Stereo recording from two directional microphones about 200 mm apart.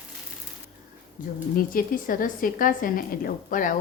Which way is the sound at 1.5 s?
45° left (ahead or behind).